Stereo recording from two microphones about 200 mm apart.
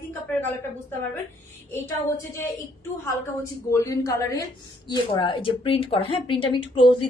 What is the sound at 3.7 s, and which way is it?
A man's voice, 15° left (ahead or behind).